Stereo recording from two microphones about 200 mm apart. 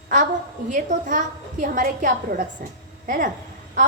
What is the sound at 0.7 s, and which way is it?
A woman's voice, 40° right (ahead or behind).